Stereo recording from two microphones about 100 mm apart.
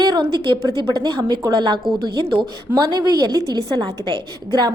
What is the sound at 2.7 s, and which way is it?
A woman's voice, 40° right (ahead or behind).